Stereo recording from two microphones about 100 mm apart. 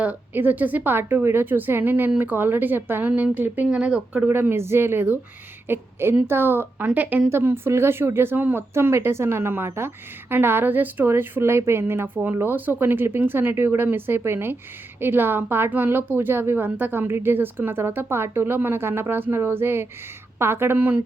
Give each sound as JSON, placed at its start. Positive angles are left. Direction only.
{"t": 0.0, "sound": "a woman's voice", "side_deg": -15}
{"t": 4.3, "sound": "a woman's voice", "side_deg": -20}